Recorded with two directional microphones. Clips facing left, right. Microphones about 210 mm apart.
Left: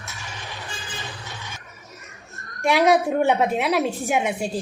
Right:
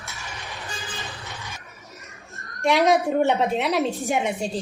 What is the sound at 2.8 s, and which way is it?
A woman's voice, 10° left (ahead or behind).